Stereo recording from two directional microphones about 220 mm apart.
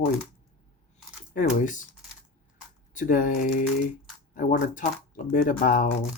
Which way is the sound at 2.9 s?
35° left (ahead or behind).